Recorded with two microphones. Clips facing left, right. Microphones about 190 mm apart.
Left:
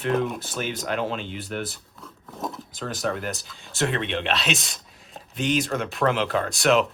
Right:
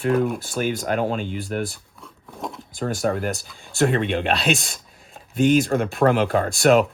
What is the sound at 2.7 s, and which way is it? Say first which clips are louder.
Speech: right 7 dB; 50° right (ahead or behind).